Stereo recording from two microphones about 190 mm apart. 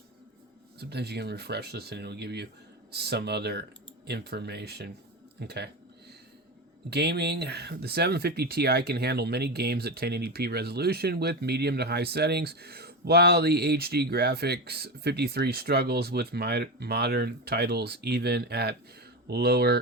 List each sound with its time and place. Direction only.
0.8 s speech: 60° right (ahead or behind)
5.4 s a sound: 60° right (ahead or behind)
6.9 s speech: 60° right (ahead or behind)